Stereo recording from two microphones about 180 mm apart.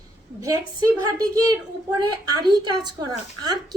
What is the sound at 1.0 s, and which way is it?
Speech, 20° right (ahead or behind).